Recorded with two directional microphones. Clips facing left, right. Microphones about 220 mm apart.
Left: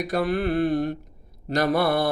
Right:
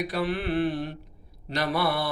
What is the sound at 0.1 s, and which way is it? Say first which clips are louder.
Mantra: left 4 dB; 45° left (ahead or behind).